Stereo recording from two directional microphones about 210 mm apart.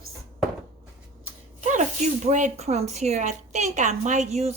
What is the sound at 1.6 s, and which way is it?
Speech, 35° right (ahead or behind).